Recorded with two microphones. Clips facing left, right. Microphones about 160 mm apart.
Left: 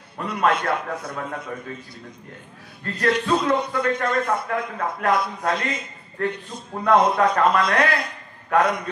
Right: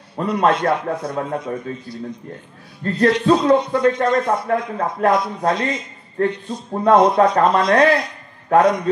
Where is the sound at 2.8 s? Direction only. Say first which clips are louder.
Right 6 dB; 30° right (ahead or behind).